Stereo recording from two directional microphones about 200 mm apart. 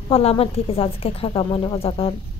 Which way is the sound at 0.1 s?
30° left (ahead or behind).